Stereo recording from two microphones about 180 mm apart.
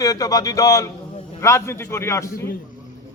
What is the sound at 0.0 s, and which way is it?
A man's voice, 20° left (ahead or behind).